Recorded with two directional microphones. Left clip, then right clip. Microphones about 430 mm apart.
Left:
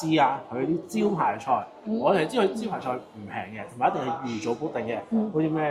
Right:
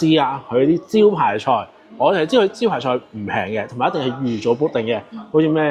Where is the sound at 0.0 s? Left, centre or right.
Right.